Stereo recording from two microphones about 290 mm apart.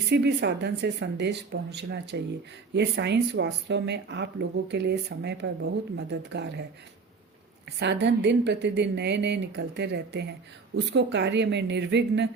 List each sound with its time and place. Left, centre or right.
0.1 s speech: right
7.8 s speech: right